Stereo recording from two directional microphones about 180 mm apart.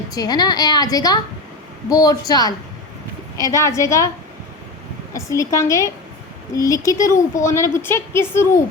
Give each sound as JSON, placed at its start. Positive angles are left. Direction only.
{"t": 0.1, "sound": "a woman's voice", "side_deg": 20}
{"t": 5.1, "sound": "a woman's voice", "side_deg": 15}